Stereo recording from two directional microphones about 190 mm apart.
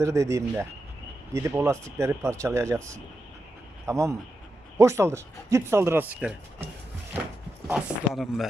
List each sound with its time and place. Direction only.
0.0 s speech: 15° right (ahead or behind)
7.7 s speech: centre (ahead or behind)